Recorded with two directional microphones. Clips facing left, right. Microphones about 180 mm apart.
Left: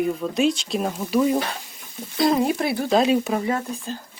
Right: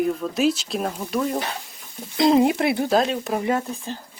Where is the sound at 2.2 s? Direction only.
20° right (ahead or behind).